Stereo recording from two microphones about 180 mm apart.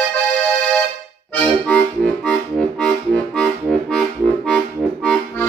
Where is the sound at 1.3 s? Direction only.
5° left (ahead or behind).